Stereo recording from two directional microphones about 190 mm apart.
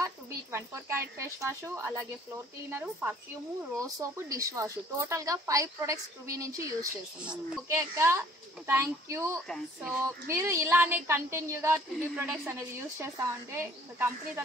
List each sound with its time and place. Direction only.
0.0 s a woman's voice: 15° right (ahead or behind)